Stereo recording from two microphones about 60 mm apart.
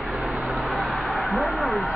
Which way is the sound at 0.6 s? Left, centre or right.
Right.